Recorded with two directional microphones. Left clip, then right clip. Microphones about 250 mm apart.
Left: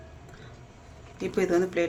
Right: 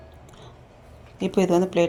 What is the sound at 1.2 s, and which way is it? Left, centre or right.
Speech, centre.